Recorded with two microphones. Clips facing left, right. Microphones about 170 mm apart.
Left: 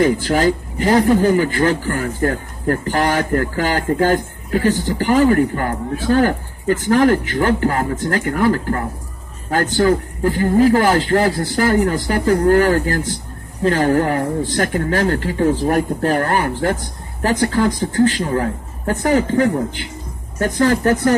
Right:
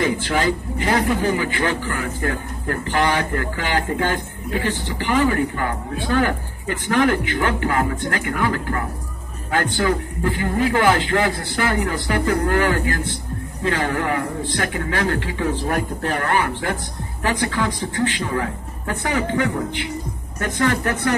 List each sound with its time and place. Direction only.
0.0 s speech: 40° left (ahead or behind)